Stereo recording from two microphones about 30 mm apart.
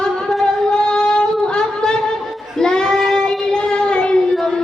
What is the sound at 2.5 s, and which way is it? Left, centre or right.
Child singing, left.